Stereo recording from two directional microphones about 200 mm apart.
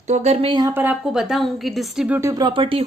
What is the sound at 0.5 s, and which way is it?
A woman's voice, 15° right (ahead or behind).